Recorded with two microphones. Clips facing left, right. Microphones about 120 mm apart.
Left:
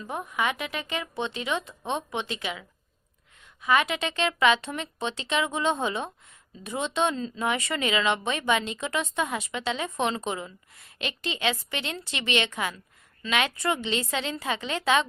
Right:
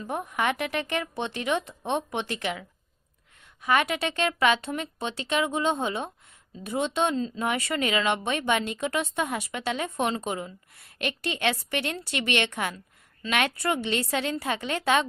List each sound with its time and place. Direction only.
0.0 s speech: 50° right (ahead or behind)
11.3 s speech: 50° right (ahead or behind)